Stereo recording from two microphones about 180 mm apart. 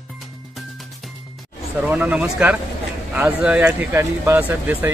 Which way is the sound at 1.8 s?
10° right (ahead or behind).